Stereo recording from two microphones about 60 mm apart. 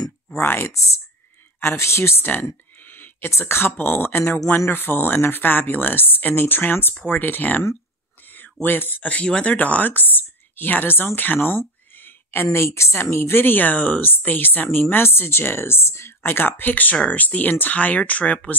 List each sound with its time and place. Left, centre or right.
0.4 s speech: left
0.7 s speech: left
1.6 s speech: left
2.9 s a sound: left
3.3 s speech: left
8.6 s speech: left
16.3 s speech: left